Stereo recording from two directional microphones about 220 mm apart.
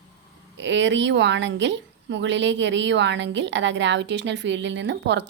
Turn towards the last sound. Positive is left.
turn(degrees=-55)  # may be behind; listen again after turning